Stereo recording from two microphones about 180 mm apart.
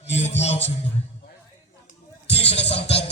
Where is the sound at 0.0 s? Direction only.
35° left (ahead or behind).